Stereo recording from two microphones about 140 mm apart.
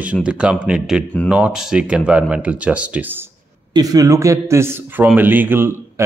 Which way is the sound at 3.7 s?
25° right (ahead or behind).